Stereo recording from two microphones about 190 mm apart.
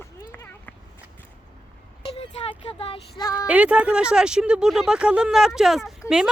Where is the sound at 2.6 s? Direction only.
30° left (ahead or behind).